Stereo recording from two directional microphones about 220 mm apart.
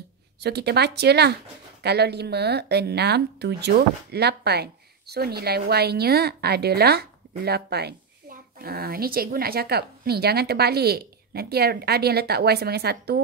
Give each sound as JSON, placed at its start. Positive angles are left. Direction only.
{"t": 0.4, "sound": "speech", "side_deg": -50}